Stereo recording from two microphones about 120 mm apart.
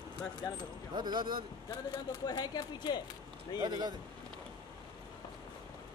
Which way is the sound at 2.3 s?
35° left (ahead or behind).